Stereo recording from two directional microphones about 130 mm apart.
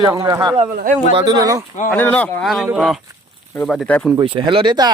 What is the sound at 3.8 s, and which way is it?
Speech, 10° left (ahead or behind).